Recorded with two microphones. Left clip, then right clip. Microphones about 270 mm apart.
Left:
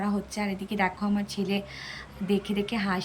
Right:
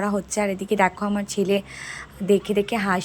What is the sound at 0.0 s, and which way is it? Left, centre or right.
A woman's voice, centre.